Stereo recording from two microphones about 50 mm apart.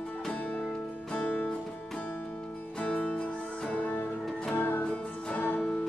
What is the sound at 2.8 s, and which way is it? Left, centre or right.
Music, left.